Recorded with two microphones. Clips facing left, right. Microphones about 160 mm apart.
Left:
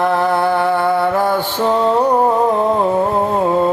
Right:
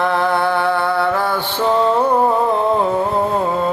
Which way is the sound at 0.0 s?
10° left (ahead or behind).